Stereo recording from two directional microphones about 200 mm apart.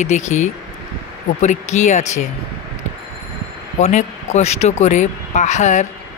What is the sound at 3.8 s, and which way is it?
Speech, 35° left (ahead or behind).